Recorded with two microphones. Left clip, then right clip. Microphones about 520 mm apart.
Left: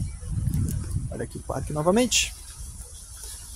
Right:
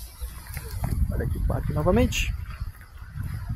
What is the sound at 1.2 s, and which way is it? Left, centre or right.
Speech, left.